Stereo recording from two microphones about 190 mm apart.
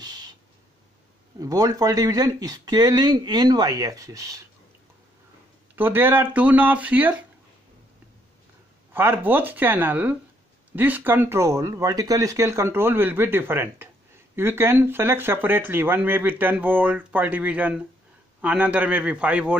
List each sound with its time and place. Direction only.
0.0 s owl: 20° right (ahead or behind)
1.4 s speech: 20° right (ahead or behind)
5.8 s speech: 10° right (ahead or behind)
8.9 s speech: 10° right (ahead or behind)